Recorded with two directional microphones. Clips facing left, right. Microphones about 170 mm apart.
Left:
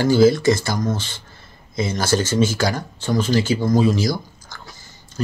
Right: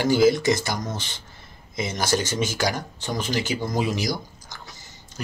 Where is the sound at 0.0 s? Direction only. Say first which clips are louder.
Left 4 dB; 20° right (ahead or behind).